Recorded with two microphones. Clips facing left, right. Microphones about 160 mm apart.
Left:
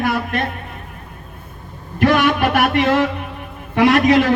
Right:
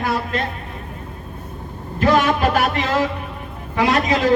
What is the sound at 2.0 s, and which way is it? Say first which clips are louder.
A man's voice: left 1 dB; 65° left (ahead or behind).